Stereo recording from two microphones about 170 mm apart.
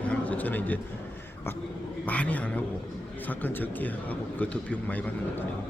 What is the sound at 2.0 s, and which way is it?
A man's voice, 10° left (ahead or behind).